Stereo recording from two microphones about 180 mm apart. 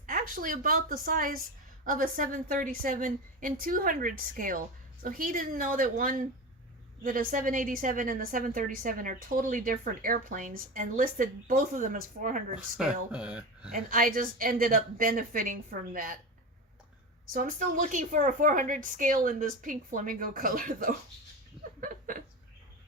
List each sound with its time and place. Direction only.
0.0 s a woman's voice: 50° right (ahead or behind)
12.5 s speech: 5° right (ahead or behind)
13.7 s a woman's voice: 50° right (ahead or behind)
17.3 s a woman's voice: 50° right (ahead or behind)
21.8 s chuckle: 50° right (ahead or behind)